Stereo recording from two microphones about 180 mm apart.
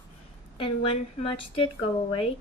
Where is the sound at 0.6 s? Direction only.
30° left (ahead or behind).